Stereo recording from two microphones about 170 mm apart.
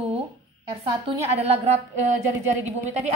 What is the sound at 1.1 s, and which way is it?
Speech, 15° right (ahead or behind).